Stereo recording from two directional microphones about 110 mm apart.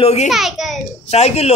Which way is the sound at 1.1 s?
75° left (ahead or behind).